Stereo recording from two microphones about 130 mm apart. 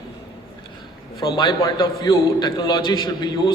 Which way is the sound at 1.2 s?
40° left (ahead or behind).